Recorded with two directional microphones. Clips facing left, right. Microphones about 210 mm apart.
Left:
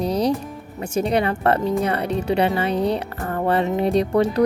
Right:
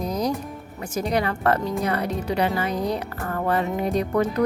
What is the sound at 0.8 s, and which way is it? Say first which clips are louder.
Speech: left 4 dB; 30° left (ahead or behind).